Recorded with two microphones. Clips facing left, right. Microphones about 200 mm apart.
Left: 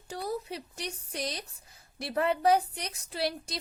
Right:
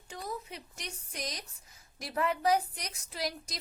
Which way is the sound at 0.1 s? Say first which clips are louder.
Left 6 dB; 35° left (ahead or behind).